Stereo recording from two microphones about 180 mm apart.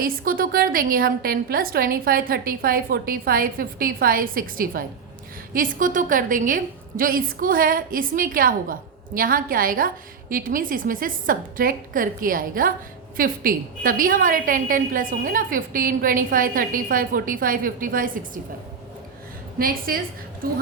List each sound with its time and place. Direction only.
0.0 s a woman's voice: 50° right (ahead or behind)
19.5 s a woman's voice: 55° right (ahead or behind)